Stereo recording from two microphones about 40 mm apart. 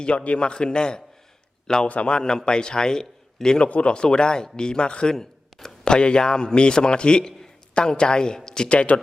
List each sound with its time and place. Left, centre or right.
0.0 s a man's voice: left
1.9 s speech: left
2.1 s a man's voice: left
3.7 s a man's voice: left
5.1 s a man's voice: centre
8.7 s speech: left